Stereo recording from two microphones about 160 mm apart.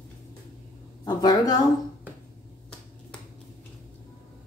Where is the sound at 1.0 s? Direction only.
25° left (ahead or behind).